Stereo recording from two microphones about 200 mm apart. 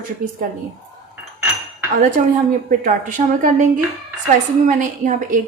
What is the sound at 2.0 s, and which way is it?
A woman's voice, 40° right (ahead or behind).